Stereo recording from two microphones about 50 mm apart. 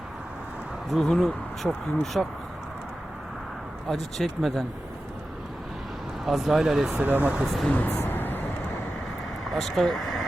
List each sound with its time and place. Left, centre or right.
0.9 s speech: centre
3.8 s speech: centre
6.2 s speech: centre
6.9 s speech: right
7.4 s speech: centre
7.7 s speech: left
8.0 s vehicle: left
9.4 s speech: centre